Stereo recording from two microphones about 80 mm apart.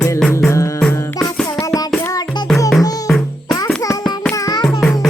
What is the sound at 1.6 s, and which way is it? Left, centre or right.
Child singing, left.